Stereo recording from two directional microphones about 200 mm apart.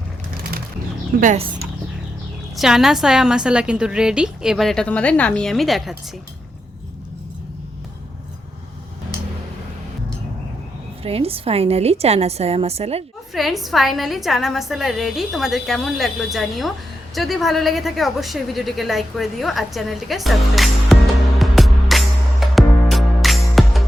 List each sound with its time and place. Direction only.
1.2 s a woman's voice: 35° right (ahead or behind)
2.6 s a woman's voice: centre (ahead or behind)
11.0 s a woman's voice: 30° right (ahead or behind)
13.3 s a woman's voice: centre (ahead or behind)
17.2 s a sound: centre (ahead or behind)